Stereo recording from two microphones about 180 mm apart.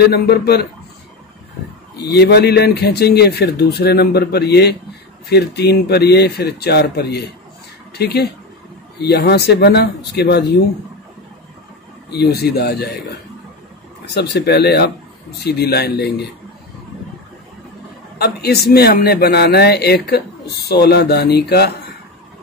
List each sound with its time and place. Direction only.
0.0 s a man's voice: 60° left (ahead or behind)
2.1 s a man's voice: 65° left (ahead or behind)
12.1 s a man's voice: 65° left (ahead or behind)
14.1 s a man's voice: 70° left (ahead or behind)
18.1 s a man's voice: 60° left (ahead or behind)